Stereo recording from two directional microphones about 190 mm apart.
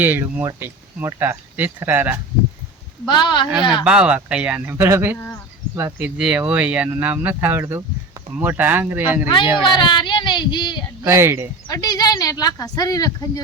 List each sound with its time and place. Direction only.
0.0 s speech: 10° right (ahead or behind)
3.1 s speech: 25° left (ahead or behind)
3.8 s speech: 5° right (ahead or behind)
9.6 s speech: 25° left (ahead or behind)
11.0 s speech: 15° right (ahead or behind)
11.7 s speech: 20° left (ahead or behind)